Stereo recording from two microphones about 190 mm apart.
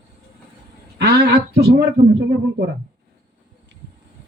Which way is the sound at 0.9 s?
60° right (ahead or behind).